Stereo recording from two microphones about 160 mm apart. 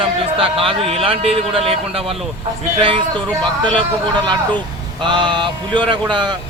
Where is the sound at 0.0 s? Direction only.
35° right (ahead or behind).